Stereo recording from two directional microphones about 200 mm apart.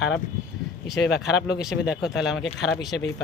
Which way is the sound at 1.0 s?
55° left (ahead or behind).